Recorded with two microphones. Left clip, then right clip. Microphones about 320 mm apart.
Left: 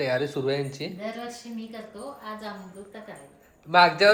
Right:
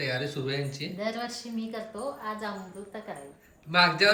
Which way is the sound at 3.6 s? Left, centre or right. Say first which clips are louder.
Left 4 dB; centre.